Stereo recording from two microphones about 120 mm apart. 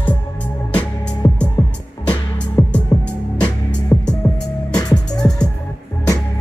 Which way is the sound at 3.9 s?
20° left (ahead or behind).